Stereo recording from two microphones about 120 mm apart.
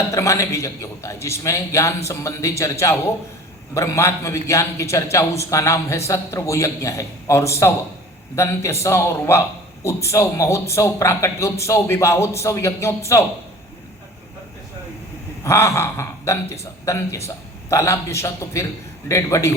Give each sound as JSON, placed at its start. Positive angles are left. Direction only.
{"t": 0.1, "sound": "speech", "side_deg": 25}
{"t": 8.8, "sound": "speech", "side_deg": 25}
{"t": 15.4, "sound": "speech", "side_deg": 25}